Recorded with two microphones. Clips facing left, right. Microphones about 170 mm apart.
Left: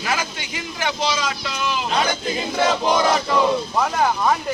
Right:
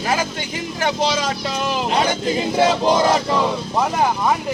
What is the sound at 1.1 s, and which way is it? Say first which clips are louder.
Speech: right 3 dB; 45° right (ahead or behind).